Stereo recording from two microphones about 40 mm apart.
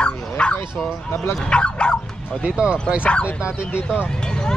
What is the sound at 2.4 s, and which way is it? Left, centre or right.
Speech, right.